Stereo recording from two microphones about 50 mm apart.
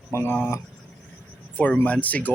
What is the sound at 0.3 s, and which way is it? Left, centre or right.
Speech, left.